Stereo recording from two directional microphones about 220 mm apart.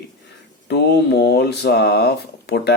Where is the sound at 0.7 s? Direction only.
50° left (ahead or behind).